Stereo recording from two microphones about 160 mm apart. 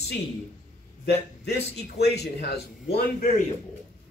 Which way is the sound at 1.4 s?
90° left.